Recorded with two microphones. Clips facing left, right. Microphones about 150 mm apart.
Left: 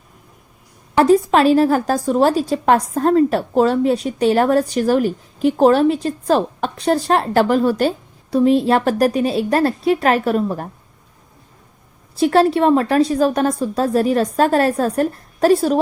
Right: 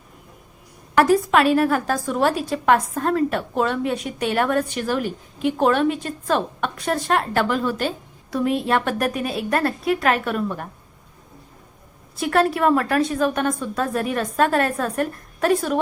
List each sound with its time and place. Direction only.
0.9 s a woman's voice: 30° left (ahead or behind)
12.2 s a woman's voice: 30° left (ahead or behind)